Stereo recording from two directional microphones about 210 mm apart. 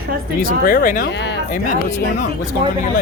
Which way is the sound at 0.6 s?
40° left (ahead or behind).